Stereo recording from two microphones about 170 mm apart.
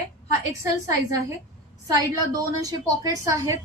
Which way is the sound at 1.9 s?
20° right (ahead or behind).